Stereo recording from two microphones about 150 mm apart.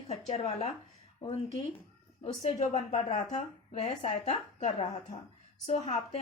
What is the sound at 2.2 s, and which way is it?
A woman's voice, 45° left (ahead or behind).